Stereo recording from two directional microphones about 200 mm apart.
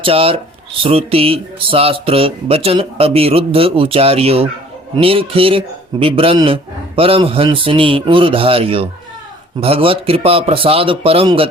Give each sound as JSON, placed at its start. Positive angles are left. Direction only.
{"t": 0.0, "sound": "speech", "side_deg": -30}